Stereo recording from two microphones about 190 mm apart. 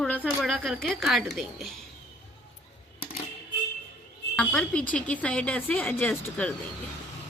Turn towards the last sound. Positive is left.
turn(degrees=5)  # may be behind; listen again after turning